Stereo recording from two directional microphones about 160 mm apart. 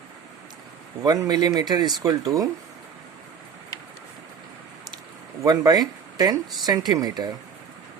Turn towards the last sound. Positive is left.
turn(degrees=-25)  # may be behind; listen again after turning